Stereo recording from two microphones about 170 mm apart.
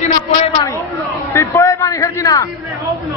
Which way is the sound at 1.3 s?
15° left (ahead or behind).